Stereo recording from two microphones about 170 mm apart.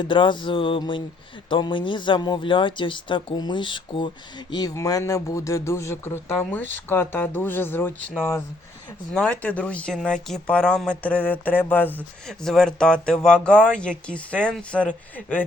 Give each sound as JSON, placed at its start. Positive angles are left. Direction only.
{"t": 0.0, "sound": "speech", "side_deg": 30}
{"t": 9.1, "sound": "speech", "side_deg": 5}